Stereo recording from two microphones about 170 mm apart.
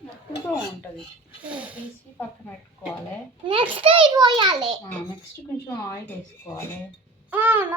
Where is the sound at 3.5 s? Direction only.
30° right (ahead or behind).